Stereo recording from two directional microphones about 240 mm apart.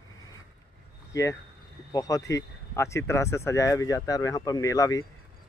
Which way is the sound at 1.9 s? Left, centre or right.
Centre.